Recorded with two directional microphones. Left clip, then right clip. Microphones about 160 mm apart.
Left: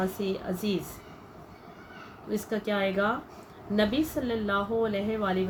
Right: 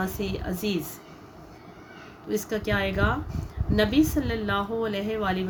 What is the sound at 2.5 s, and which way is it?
A woman's voice, 90° right.